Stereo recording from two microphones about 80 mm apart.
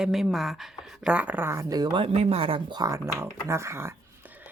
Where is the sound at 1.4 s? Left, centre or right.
Right.